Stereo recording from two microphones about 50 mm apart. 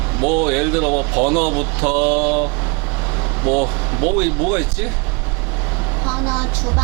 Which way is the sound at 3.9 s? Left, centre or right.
Right.